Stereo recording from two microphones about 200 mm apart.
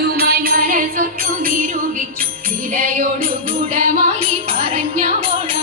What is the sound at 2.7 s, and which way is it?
Music, 45° right (ahead or behind).